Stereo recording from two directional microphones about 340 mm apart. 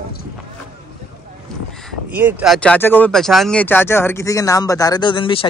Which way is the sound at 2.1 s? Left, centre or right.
Centre.